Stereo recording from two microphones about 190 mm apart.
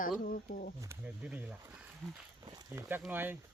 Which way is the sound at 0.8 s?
10° right (ahead or behind).